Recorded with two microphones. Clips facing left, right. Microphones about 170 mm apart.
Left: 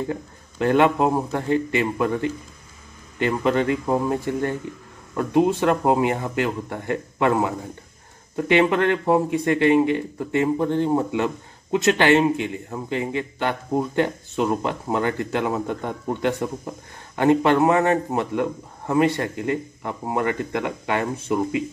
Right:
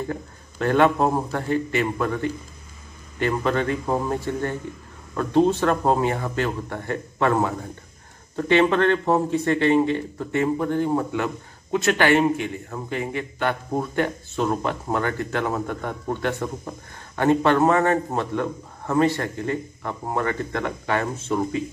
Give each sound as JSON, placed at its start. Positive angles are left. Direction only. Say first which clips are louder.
{"t": 0.1, "sound": "a man's voice", "louder": "left 2 dB", "side_deg": 15}